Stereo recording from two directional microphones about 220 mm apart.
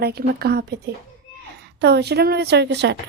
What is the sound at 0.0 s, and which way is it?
Speech, 45° right (ahead or behind).